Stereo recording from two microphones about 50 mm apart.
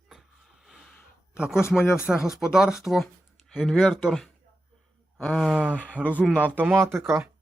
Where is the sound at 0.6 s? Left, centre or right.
Centre.